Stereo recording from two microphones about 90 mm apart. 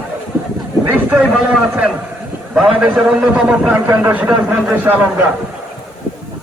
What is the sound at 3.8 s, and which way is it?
A man's voice, 20° right (ahead or behind).